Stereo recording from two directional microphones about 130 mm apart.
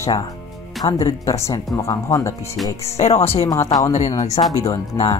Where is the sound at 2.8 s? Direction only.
55° left (ahead or behind).